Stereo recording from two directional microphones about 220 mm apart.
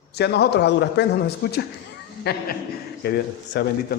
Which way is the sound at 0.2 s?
50° left (ahead or behind).